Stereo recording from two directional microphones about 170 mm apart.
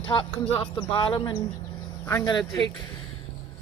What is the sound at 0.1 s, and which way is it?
Speech, 30° left (ahead or behind).